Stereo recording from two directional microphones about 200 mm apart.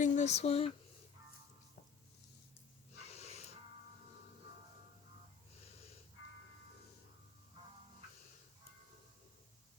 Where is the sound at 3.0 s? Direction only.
30° left (ahead or behind).